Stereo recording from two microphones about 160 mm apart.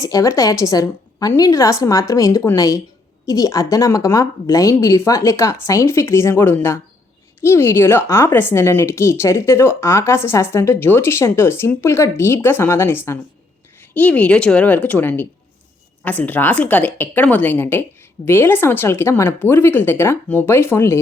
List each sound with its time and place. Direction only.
0.0 s a woman's voice: 20° left (ahead or behind)